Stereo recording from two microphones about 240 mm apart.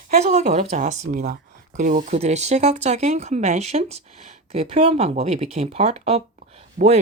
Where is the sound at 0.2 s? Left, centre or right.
Right.